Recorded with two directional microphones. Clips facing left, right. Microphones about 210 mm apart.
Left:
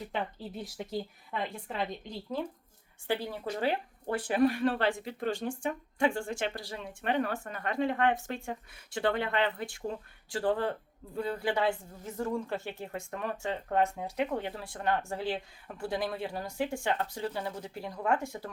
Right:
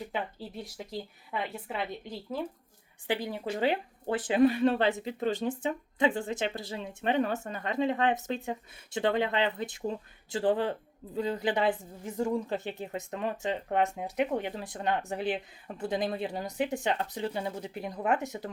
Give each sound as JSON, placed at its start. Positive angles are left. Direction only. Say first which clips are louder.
{"t": 0.1, "sound": "a woman's voice", "louder": "even", "side_deg": 0}